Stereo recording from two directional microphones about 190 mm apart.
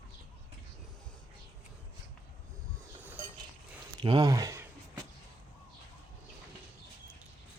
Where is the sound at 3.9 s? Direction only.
25° right (ahead or behind).